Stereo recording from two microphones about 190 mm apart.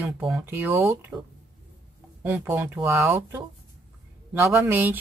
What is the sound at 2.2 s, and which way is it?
Speech, 10° right (ahead or behind).